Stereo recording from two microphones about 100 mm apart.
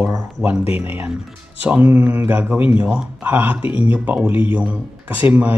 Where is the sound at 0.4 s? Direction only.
15° right (ahead or behind).